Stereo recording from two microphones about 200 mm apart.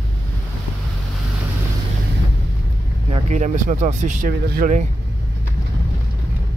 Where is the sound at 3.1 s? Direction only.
35° right (ahead or behind).